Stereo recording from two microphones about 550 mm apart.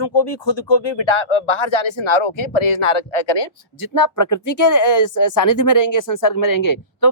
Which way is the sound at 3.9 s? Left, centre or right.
Left.